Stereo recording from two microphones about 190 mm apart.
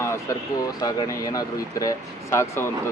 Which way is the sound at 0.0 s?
15° left (ahead or behind).